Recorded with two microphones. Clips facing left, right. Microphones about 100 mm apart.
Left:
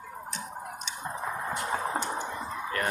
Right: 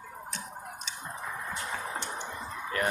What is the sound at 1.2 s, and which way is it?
Clip-clop, 30° left (ahead or behind).